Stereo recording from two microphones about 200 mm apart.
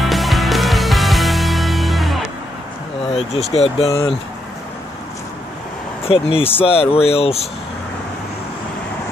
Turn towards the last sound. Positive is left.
turn(degrees=30)  # may be behind; listen again after turning